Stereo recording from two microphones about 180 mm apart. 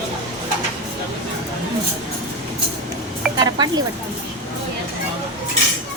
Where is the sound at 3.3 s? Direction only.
20° right (ahead or behind).